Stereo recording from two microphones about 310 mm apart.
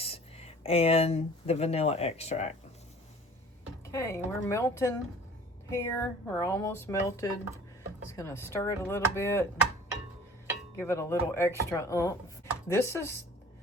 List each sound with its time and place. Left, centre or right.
0.0 s speech: centre
3.9 s speech: centre
10.8 s speech: centre